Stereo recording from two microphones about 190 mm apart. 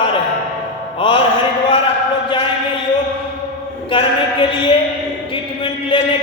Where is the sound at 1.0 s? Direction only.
30° left (ahead or behind).